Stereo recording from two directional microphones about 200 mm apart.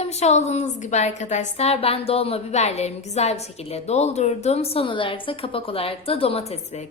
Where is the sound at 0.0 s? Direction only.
35° left (ahead or behind).